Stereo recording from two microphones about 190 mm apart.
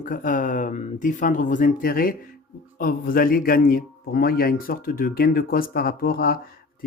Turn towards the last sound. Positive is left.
turn(degrees=50)  # may be behind; listen again after turning